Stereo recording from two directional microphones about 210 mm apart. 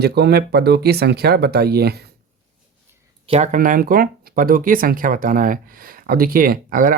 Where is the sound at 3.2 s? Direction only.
30° right (ahead or behind).